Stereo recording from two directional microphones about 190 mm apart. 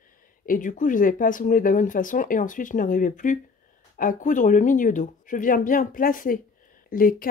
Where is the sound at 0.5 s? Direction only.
45° left (ahead or behind).